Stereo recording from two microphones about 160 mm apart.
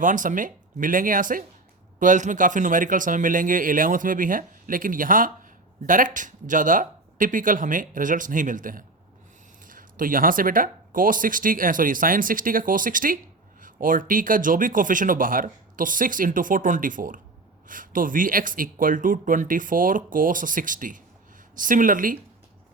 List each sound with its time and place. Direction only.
0.0 s speech: 55° right (ahead or behind)